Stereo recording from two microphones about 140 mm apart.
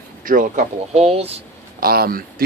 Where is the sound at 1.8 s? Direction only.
90° right.